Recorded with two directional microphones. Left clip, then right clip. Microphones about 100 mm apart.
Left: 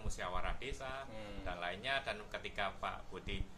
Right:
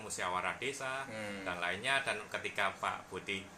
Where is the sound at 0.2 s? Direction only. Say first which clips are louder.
Right 6 dB; 25° left (ahead or behind).